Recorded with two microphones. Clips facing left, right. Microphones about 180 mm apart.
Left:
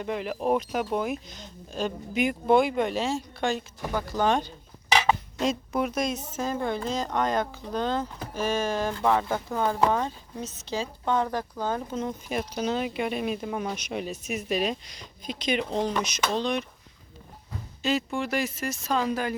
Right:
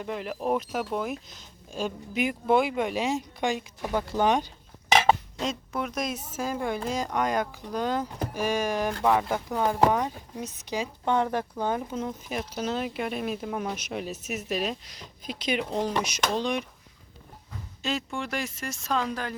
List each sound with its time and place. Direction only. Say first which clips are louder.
0.0 s speech: left 2 dB; centre (ahead or behind)
5.4 s speech: left 4 dB; 10° left (ahead or behind); by 11.8 s 20° right (ahead or behind)
11.9 s speech: left 1 dB; centre (ahead or behind)
17.8 s speech: left 4 dB; centre (ahead or behind)